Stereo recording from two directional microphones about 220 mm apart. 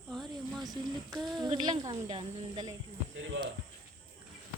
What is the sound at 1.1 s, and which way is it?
Speech, centre (ahead or behind).